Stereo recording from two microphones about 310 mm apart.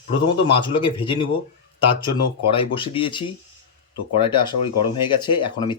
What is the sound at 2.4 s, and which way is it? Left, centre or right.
Speech, centre.